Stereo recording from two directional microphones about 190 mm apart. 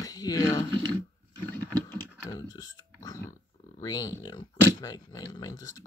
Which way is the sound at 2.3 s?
20° left (ahead or behind).